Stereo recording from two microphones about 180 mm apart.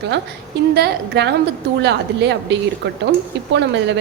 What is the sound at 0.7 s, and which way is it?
A woman's voice, 70° right (ahead or behind).